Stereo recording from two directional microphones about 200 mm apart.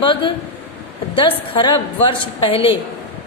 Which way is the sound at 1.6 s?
25° left (ahead or behind).